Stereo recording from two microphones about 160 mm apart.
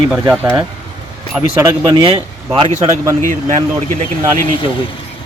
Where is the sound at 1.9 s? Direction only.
30° right (ahead or behind).